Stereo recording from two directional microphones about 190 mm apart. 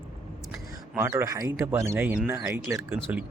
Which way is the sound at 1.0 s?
10° right (ahead or behind).